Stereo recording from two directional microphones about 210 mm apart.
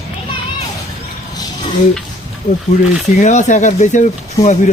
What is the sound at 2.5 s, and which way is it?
Speech, 40° left (ahead or behind).